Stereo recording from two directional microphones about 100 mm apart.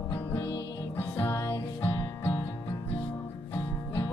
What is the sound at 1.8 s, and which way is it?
Music, 50° left (ahead or behind).